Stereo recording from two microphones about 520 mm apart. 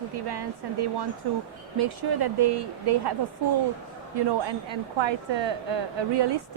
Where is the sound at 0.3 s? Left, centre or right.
Right.